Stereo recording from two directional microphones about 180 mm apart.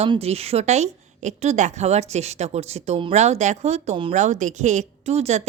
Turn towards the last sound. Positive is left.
turn(degrees=-35)  # may be behind; listen again after turning